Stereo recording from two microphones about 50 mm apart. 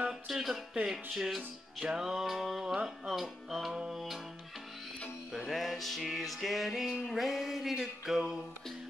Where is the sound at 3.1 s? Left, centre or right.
Centre.